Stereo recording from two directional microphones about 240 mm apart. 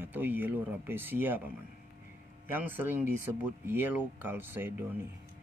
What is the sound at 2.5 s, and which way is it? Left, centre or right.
Speech, centre.